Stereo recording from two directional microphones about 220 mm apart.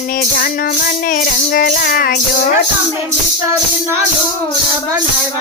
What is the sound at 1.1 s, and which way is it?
Music, 40° left (ahead or behind).